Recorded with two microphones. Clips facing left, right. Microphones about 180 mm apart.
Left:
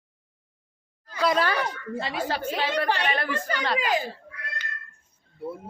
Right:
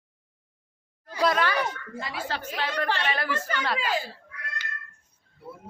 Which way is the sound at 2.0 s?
30° left (ahead or behind).